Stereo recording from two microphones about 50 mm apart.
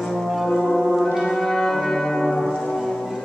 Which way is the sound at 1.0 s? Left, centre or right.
Centre.